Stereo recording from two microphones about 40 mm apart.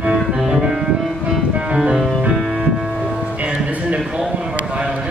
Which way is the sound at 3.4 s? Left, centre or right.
Right.